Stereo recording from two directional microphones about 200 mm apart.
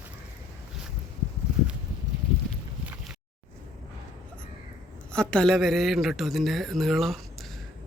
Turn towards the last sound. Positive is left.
turn(degrees=0)  # may be behind; listen again after turning